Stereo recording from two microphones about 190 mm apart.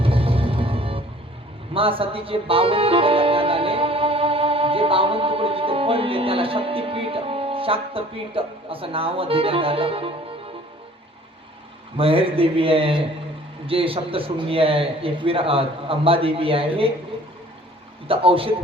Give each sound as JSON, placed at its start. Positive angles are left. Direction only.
{"t": 0.0, "sound": "music", "side_deg": -30}
{"t": 1.7, "sound": "speech", "side_deg": -30}
{"t": 11.9, "sound": "a man's voice", "side_deg": -30}
{"t": 18.1, "sound": "a man's voice", "side_deg": -30}